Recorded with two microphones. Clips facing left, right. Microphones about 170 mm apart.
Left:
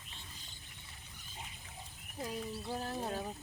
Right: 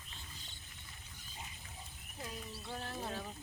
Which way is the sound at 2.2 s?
35° left (ahead or behind).